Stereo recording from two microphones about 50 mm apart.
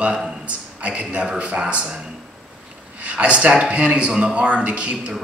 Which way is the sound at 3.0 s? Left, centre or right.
Right.